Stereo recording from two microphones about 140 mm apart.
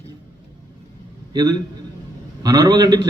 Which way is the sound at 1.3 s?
30° right (ahead or behind).